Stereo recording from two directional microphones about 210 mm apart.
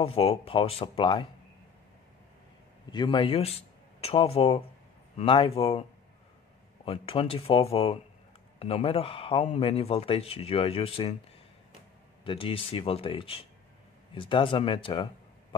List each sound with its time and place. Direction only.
0.0 s speech: 25° left (ahead or behind)
2.9 s speech: 20° left (ahead or behind)
12.3 s speech: 25° left (ahead or behind)